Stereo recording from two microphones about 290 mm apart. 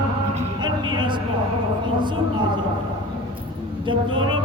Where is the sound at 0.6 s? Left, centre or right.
Centre.